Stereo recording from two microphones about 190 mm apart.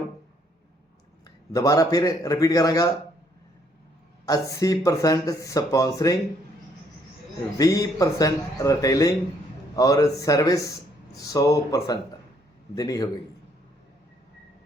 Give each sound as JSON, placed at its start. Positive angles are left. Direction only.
{"t": 1.5, "sound": "a man's voice", "side_deg": 20}
{"t": 4.3, "sound": "speech", "side_deg": 15}
{"t": 7.6, "sound": "a man's voice", "side_deg": 20}